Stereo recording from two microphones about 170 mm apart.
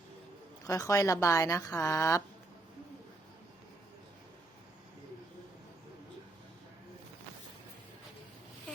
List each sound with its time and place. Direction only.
0.7 s a woman's voice: 20° left (ahead or behind)